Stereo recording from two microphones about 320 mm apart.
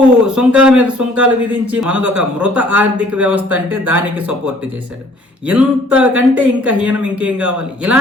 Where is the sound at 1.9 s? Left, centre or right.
Right.